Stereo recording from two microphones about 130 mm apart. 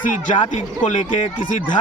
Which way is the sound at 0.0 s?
75° left (ahead or behind).